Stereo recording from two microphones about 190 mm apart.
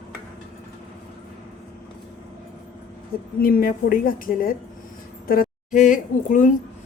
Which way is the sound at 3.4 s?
50° left (ahead or behind).